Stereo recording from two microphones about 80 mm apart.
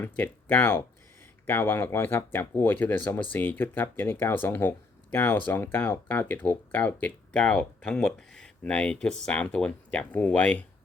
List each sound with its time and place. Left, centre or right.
0.0 s speech: left